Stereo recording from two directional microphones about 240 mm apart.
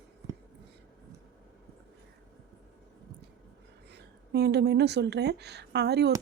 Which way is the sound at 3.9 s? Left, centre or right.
Right.